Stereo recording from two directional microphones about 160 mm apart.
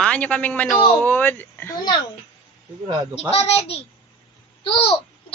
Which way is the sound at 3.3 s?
40° left (ahead or behind).